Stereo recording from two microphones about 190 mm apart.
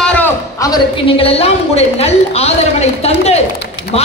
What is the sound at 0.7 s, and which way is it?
A woman's voice, 30° left (ahead or behind).